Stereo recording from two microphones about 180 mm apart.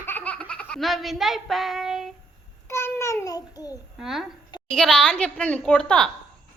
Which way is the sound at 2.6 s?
15° left (ahead or behind).